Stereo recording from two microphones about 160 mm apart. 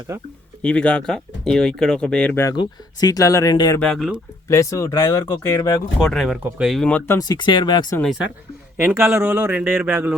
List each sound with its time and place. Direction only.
0.1 s speech: 20° right (ahead or behind)
0.6 s speech: 10° left (ahead or behind); by 3.8 s 25° left (ahead or behind)
3.8 s speech: centre (ahead or behind)
4.4 s speech: 20° left (ahead or behind)
6.0 s speech: centre (ahead or behind)
7.2 s speech: 25° left (ahead or behind)
8.8 s a man's voice: 15° right (ahead or behind)